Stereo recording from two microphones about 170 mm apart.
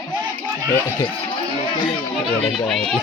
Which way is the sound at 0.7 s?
15° left (ahead or behind).